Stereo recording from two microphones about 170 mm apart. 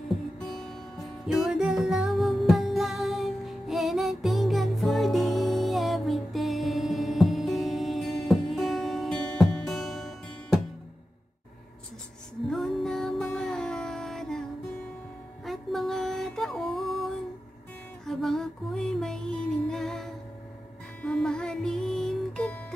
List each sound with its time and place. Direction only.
0.4 s music: centre (ahead or behind)
12.4 s music: centre (ahead or behind)
15.4 s music: centre (ahead or behind)
18.0 s music: centre (ahead or behind)